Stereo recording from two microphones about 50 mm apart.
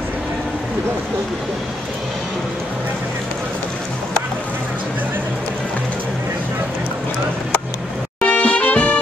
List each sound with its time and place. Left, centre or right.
8.2 s music: left